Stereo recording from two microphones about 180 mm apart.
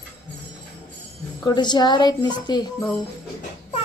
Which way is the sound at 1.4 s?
25° left (ahead or behind).